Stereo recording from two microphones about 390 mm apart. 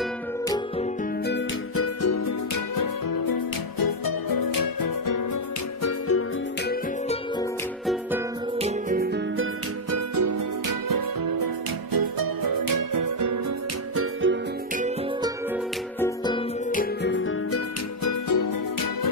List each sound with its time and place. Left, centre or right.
1.2 s music: left
2.0 s music: left
5.8 s music: left
6.7 s music: centre
7.8 s music: centre
8.5 s music: centre
9.8 s music: right
13.9 s music: right
16.7 s music: left
18.0 s music: left